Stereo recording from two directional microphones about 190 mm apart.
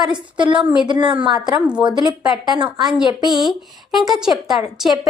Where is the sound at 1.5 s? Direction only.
5° right (ahead or behind).